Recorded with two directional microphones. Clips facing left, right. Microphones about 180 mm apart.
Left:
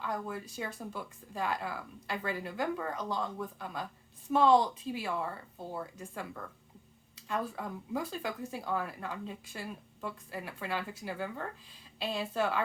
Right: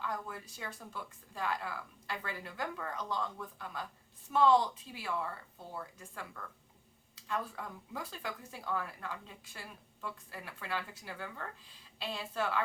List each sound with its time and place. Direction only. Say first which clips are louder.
0.3 s a woman's voice: left 6 dB; 15° left (ahead or behind)